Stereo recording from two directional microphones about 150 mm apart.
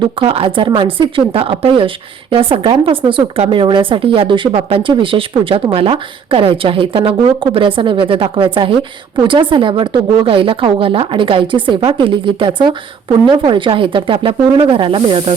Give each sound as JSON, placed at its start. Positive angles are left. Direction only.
{"t": 0.2, "sound": "speech", "side_deg": -35}